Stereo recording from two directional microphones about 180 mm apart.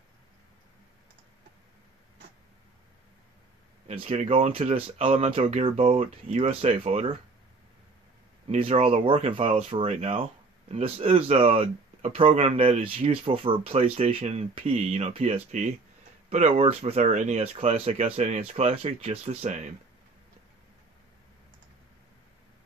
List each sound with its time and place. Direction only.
3.8 s speech: 30° right (ahead or behind)
8.5 s speech: 35° right (ahead or behind)